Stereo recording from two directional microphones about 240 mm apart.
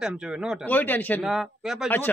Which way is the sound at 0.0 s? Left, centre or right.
Centre.